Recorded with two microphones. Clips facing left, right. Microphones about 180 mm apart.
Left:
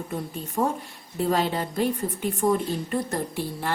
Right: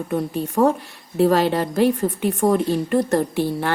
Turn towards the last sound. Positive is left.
turn(degrees=-70)  # may be behind; listen again after turning